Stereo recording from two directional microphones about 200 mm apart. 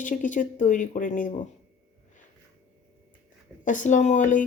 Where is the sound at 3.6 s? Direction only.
40° left (ahead or behind).